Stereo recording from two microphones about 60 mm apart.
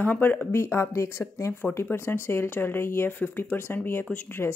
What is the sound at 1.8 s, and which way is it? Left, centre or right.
Speech, left.